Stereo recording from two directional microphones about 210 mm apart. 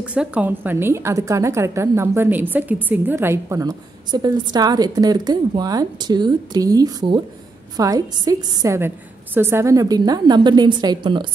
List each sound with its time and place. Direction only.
0.0 s a woman's voice: 5° right (ahead or behind); by 11.2 s 20° right (ahead or behind)